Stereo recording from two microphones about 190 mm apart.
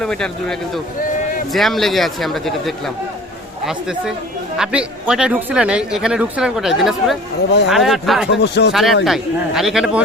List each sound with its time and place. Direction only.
0.0 s speech: 5° left (ahead or behind)
1.5 s speech: centre (ahead or behind)
8.4 s speech: 60° left (ahead or behind)
8.7 s speech: centre (ahead or behind)